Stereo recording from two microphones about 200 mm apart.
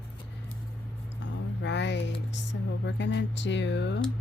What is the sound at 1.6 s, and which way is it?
A woman's voice, 60° left (ahead or behind).